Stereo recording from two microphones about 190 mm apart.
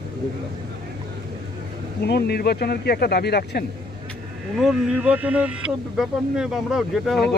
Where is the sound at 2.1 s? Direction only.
55° left (ahead or behind).